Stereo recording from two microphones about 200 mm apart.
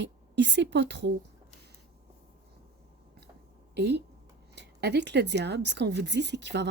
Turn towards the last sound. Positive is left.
turn(degrees=-60)  # may be behind; listen again after turning